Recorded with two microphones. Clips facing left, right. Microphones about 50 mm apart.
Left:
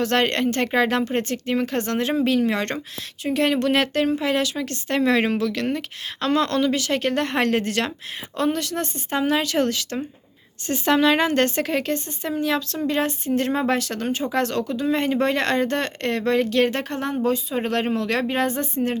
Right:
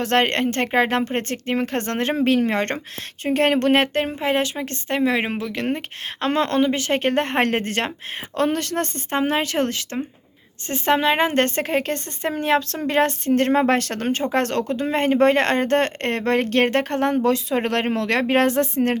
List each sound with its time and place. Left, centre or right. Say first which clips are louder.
0.0 s speech: right 1 dB; right
4.9 s a woman's voice: left 2 dB; centre; by 7.9 s right
8.4 s speech: right 2 dB; right
17.2 s speech: right 3 dB; right